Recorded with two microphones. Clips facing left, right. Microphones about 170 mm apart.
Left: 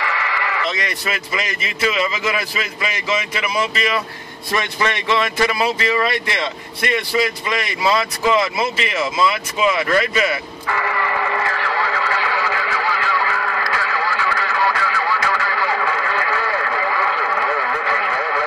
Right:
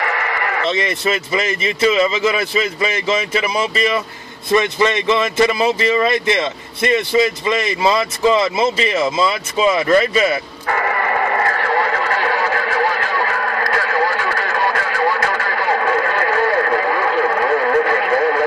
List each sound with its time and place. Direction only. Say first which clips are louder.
0.0 s sheep: right 3 dB; 50° right (ahead or behind)
0.7 s speech: right 6 dB; 25° right (ahead or behind)
10.7 s radio: right 3 dB; 50° right (ahead or behind)